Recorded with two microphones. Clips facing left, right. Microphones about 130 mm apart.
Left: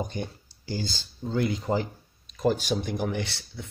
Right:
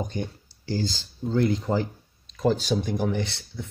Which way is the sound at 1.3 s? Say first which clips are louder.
Right 3 dB; 15° left (ahead or behind).